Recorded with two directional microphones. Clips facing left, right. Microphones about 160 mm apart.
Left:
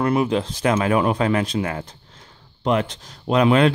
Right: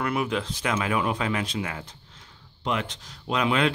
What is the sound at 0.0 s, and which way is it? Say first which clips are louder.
Speech: left 7 dB; 30° left (ahead or behind).